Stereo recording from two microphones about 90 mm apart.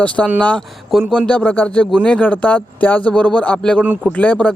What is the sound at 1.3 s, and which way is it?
A man's voice, 15° left (ahead or behind).